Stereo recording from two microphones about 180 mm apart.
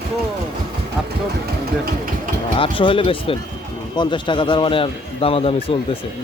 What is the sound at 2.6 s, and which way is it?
A man's voice, 30° left (ahead or behind).